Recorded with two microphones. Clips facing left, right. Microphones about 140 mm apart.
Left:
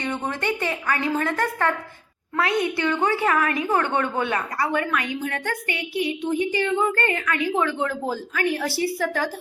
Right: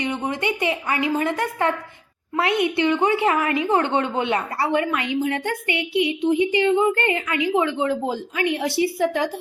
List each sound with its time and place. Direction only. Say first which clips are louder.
0.0 s a woman's voice: right 2 dB; 15° right (ahead or behind)